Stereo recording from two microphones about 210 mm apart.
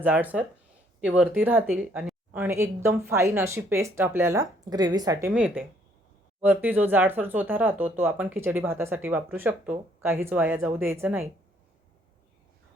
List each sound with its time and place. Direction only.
0.0 s speech: 10° right (ahead or behind)
5.3 s speech: 5° right (ahead or behind)